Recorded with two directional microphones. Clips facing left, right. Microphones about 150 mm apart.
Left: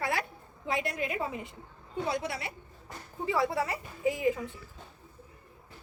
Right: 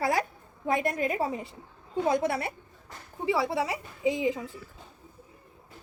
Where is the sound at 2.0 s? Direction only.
50° right (ahead or behind).